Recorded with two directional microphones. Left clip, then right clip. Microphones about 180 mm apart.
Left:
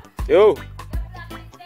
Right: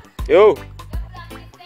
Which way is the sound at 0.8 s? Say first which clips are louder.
Even; centre (ahead or behind).